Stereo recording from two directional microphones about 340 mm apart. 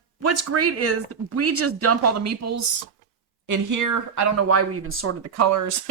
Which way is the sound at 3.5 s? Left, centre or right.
Right.